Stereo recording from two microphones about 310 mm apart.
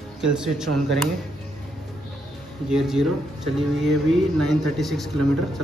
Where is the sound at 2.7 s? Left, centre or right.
Centre.